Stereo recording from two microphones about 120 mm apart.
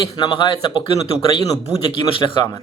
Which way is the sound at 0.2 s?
40° left (ahead or behind).